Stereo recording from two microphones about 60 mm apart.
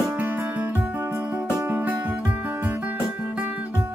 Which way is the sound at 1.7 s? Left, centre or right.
Right.